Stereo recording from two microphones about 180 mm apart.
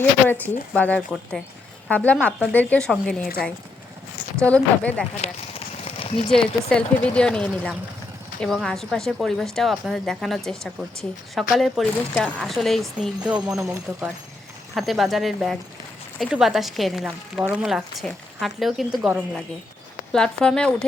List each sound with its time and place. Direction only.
0.3 s a woman's voice: 10° left (ahead or behind)
4.4 s a woman's voice: 5° left (ahead or behind)
5.2 s a sound: 35° left (ahead or behind)
6.3 s a woman's voice: 5° left (ahead or behind); by 14.1 s 15° right (ahead or behind)
14.8 s a woman's voice: centre (ahead or behind)